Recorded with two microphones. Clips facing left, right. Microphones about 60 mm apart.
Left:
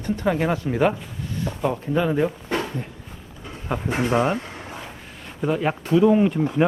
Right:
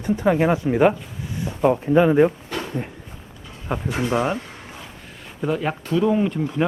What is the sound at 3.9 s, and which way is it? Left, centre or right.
Speech, left.